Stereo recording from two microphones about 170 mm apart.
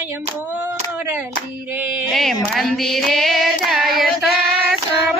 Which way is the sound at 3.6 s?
Centre (ahead or behind).